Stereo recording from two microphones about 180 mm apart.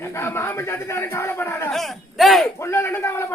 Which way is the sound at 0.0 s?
15° left (ahead or behind).